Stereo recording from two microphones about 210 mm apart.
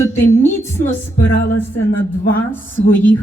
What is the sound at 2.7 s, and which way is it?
Speech, 10° left (ahead or behind).